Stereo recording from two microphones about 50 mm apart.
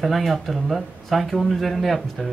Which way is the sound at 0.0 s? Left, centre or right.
Centre.